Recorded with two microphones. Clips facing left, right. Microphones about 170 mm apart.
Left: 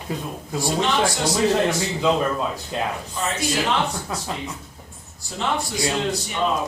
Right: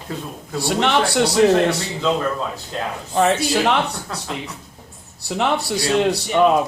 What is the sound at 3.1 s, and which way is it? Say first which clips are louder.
Speech: right 9 dB; 70° right (ahead or behind).